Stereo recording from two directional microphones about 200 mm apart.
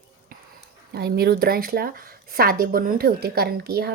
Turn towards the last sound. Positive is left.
turn(degrees=-50)  # may be behind; listen again after turning